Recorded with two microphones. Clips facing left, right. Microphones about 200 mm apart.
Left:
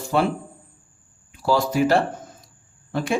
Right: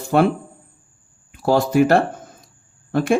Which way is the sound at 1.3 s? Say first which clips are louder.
Right 4 dB; 50° right (ahead or behind).